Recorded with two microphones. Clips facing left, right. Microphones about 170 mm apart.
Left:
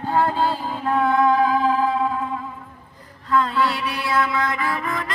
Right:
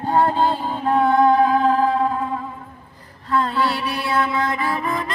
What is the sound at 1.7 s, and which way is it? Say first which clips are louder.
Music: right 2 dB; 45° right (ahead or behind).